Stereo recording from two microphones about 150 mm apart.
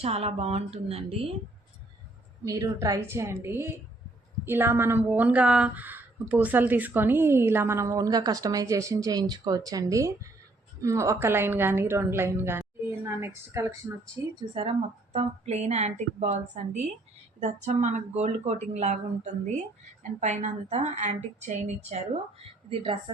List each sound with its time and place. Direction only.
0.0 s speech: 40° right (ahead or behind)
2.4 s a woman's voice: 20° right (ahead or behind)
14.3 s speech: 40° right (ahead or behind)